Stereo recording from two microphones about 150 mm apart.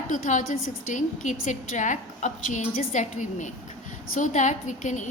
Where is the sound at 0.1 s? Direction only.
55° left (ahead or behind).